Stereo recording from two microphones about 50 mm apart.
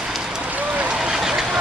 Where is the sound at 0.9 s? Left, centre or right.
Centre.